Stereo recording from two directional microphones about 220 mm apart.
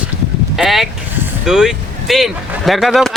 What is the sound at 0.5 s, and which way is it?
Speech, centre (ahead or behind).